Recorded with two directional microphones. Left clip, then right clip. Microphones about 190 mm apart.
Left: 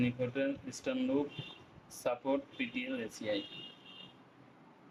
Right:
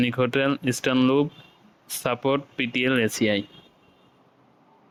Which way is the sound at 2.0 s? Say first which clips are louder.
Right 10 dB; 45° right (ahead or behind).